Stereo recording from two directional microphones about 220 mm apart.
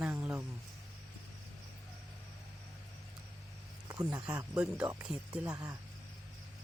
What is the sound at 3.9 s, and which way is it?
Speech, 15° right (ahead or behind).